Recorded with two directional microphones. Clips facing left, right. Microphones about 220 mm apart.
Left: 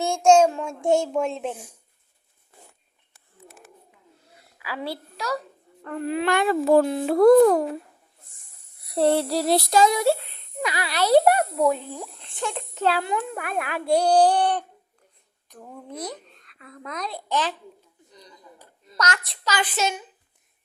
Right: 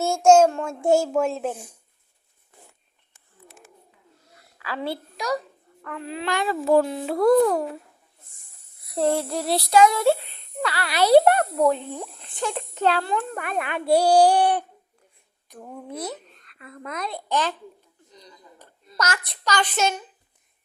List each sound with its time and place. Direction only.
0.0 s a child's voice: 5° right (ahead or behind)
4.5 s a sound: 10° left (ahead or behind)
5.1 s a child's voice: 15° right (ahead or behind)
6.0 s speech: 55° left (ahead or behind)
9.3 s female singing: 40° left (ahead or behind)
10.6 s a child's voice: 15° left (ahead or behind)
10.9 s speech: 10° right (ahead or behind)
11.3 s a child's voice: 10° left (ahead or behind)
18.9 s a child's voice: 5° right (ahead or behind)